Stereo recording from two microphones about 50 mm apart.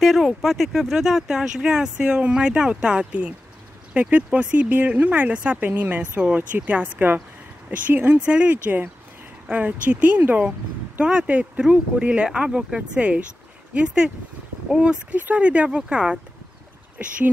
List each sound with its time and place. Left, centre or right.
0.0 s speech: centre; by 4.6 s right
4.6 s speech: right
5.6 s speech: right
8.2 s speech: right
11.0 s speech: centre
15.1 s speech: right